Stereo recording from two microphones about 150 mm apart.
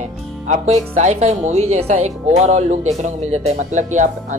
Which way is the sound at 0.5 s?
50° right (ahead or behind).